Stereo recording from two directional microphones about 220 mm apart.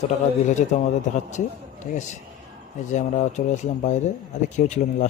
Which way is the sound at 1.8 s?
35° left (ahead or behind).